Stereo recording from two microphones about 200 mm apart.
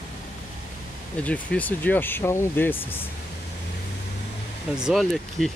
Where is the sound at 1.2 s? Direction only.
5° left (ahead or behind).